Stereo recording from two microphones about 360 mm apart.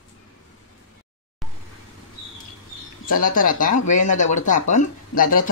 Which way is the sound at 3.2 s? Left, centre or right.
Left.